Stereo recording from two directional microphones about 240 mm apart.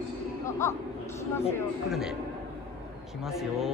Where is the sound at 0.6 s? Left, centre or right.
Centre.